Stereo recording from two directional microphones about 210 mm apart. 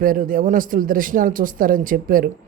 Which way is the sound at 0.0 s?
40° right (ahead or behind).